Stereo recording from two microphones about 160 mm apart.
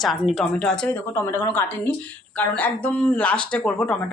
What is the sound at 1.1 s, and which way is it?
Speech, 15° left (ahead or behind).